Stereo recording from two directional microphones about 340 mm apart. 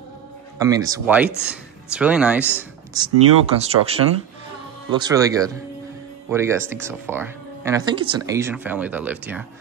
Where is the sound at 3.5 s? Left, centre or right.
Centre.